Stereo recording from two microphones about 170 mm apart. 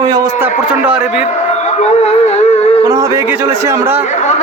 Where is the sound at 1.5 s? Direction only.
40° left (ahead or behind).